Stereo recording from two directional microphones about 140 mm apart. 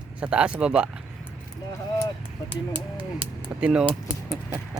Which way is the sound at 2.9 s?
40° right (ahead or behind).